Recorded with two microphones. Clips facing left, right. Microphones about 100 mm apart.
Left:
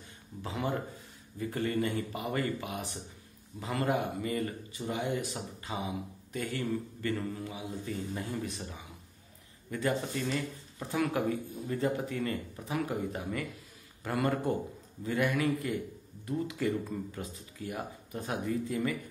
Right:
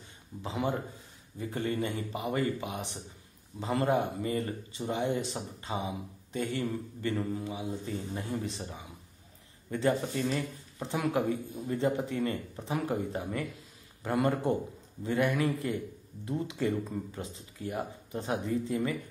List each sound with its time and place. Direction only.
0.4 s speech: 20° right (ahead or behind)